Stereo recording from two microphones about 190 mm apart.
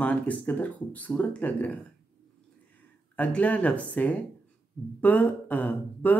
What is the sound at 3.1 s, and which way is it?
Speech, 10° left (ahead or behind).